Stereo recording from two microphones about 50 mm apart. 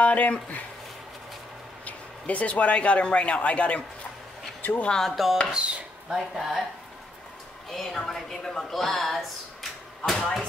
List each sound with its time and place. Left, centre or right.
0.0 s speech: left
1.9 s speech: left
4.6 s a sound: left
4.8 s speech: centre
5.1 s speech: centre
7.7 s speech: centre